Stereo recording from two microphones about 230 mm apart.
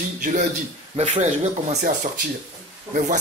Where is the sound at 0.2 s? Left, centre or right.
Right.